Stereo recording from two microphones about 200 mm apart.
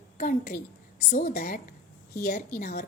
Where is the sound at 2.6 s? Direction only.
45° left (ahead or behind).